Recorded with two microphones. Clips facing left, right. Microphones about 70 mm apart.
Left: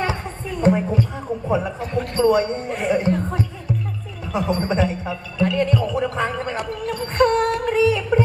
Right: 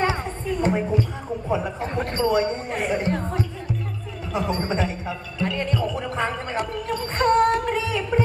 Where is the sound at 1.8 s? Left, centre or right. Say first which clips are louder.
Left 4 dB; right.